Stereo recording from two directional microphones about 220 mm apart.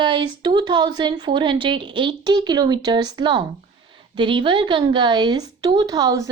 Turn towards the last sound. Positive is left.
turn(degrees=-15)  # may be behind; listen again after turning